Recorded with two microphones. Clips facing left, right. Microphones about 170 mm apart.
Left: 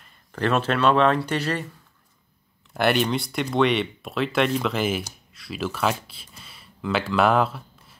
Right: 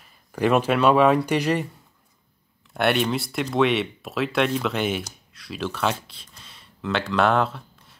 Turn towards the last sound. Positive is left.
turn(degrees=5)  # may be behind; listen again after turning